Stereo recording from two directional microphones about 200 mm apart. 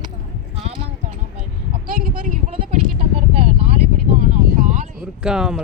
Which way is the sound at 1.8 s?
45° right (ahead or behind).